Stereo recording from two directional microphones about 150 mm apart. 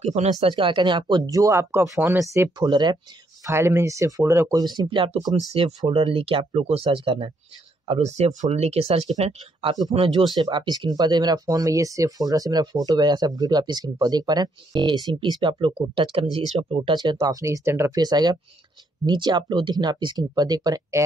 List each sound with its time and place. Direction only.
0.0 s speech: 45° right (ahead or behind); by 2.5 s 15° right (ahead or behind)
2.6 s speech: 30° right (ahead or behind)
3.4 s speech: 15° right (ahead or behind); by 7.2 s 40° right (ahead or behind)
7.9 s speech: 50° right (ahead or behind); by 21.0 s 25° right (ahead or behind)